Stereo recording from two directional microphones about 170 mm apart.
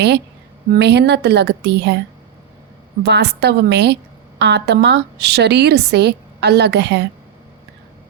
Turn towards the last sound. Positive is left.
turn(degrees=-90)